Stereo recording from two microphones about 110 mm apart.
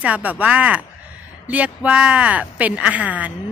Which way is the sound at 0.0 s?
15° right (ahead or behind).